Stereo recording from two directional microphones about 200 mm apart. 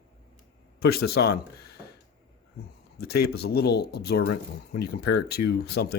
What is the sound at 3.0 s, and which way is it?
Speech, 50° left (ahead or behind).